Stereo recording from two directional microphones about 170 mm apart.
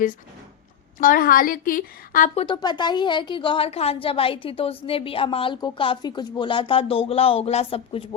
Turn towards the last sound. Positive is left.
turn(degrees=35)  # may be behind; listen again after turning